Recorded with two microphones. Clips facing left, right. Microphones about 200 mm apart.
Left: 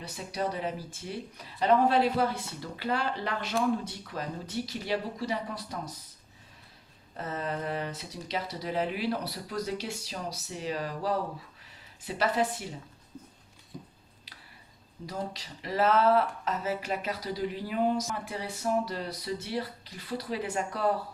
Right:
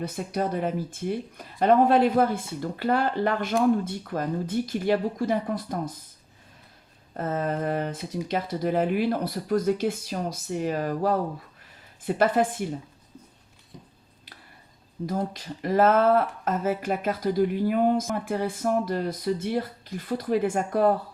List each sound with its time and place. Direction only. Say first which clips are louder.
0.0 s speech: right 5 dB; 50° right (ahead or behind)
7.2 s speech: right 7 dB; 50° right (ahead or behind)
15.0 s speech: right 7 dB; 50° right (ahead or behind)